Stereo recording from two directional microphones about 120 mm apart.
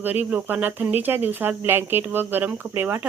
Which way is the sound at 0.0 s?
15° right (ahead or behind).